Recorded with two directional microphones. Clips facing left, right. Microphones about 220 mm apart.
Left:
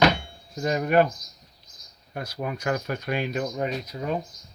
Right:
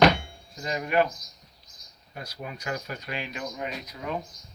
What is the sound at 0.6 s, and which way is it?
Speech, 50° left (ahead or behind).